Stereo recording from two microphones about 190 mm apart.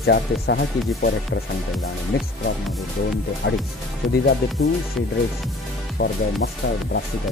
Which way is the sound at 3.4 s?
70° left (ahead or behind).